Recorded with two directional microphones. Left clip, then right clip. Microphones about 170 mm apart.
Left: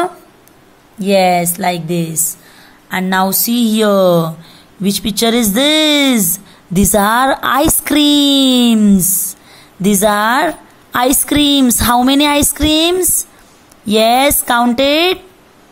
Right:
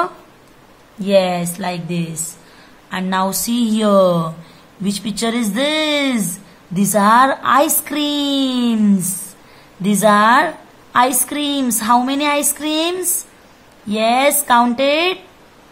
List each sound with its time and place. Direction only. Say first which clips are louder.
1.0 s a woman's voice: left 4 dB; 30° left (ahead or behind); by 8.7 s 45° left (ahead or behind)
9.8 s a woman's voice: even; 40° left (ahead or behind)